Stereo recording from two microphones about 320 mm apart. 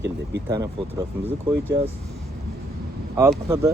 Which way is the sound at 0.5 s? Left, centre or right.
Centre.